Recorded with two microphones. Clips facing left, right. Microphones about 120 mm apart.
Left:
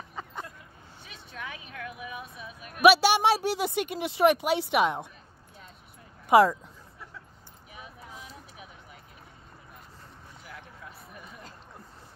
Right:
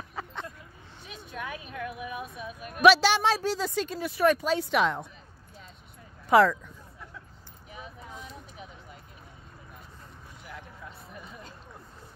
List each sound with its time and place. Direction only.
0.1 s a sound: 5° left (ahead or behind)
1.7 s speech: 5° right (ahead or behind)
2.1 s speech: 45° right (ahead or behind)
2.8 s speech: 10° left (ahead or behind)
6.2 s speech: 10° left (ahead or behind)
7.7 s a sound: 5° left (ahead or behind)